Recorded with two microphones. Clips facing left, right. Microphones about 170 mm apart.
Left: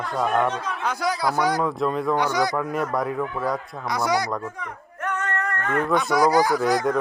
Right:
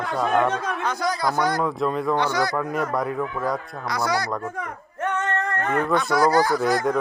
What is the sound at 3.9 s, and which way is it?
Speech, 20° left (ahead or behind).